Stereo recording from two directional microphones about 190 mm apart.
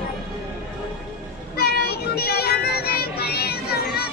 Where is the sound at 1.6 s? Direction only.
55° left (ahead or behind).